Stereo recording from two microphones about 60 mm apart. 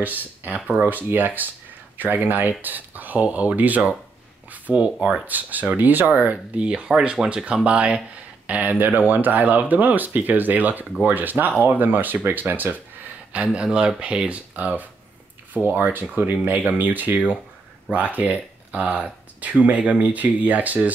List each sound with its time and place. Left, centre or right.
0.0 s speech: right
4.5 s a sound: right
5.2 s speech: right
6.5 s speech: centre
13.3 s speech: centre
18.8 s speech: centre